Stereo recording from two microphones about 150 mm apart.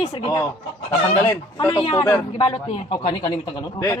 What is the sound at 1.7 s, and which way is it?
Speech, 35° left (ahead or behind).